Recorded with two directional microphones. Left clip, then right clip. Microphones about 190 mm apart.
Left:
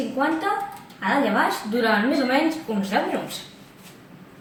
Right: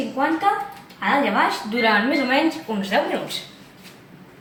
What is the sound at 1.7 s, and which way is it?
A woman's voice, 15° right (ahead or behind).